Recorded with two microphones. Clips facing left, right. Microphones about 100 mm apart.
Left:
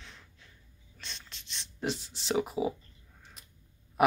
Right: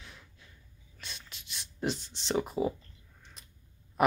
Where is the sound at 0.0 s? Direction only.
5° right (ahead or behind).